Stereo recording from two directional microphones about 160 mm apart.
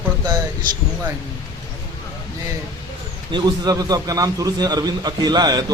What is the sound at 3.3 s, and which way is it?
A man's voice, 30° right (ahead or behind).